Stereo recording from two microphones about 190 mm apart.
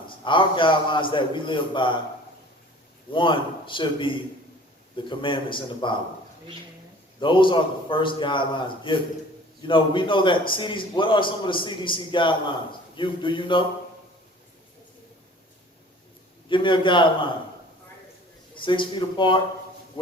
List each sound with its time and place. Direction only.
0.3 s a man's voice: 25° left (ahead or behind)
3.1 s a man's voice: 25° left (ahead or behind)
7.2 s a man's voice: 25° left (ahead or behind)
16.5 s a man's voice: 25° left (ahead or behind)
18.5 s a man's voice: 25° left (ahead or behind)